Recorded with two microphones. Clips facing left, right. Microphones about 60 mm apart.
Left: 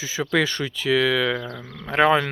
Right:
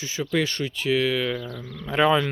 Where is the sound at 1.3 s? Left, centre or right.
Left.